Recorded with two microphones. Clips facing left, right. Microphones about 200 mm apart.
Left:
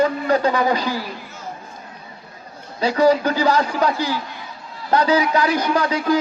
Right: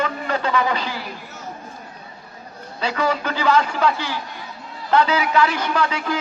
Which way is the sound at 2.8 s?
35° left (ahead or behind).